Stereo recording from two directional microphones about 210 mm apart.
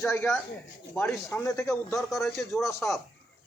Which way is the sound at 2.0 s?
Centre (ahead or behind).